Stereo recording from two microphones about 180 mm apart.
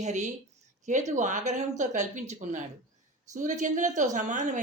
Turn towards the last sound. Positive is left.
turn(degrees=-45)  # may be behind; listen again after turning